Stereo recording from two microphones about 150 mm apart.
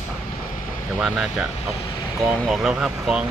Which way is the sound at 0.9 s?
Centre (ahead or behind).